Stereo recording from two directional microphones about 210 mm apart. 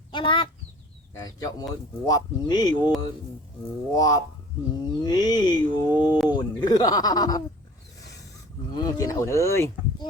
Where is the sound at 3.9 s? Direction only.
15° left (ahead or behind).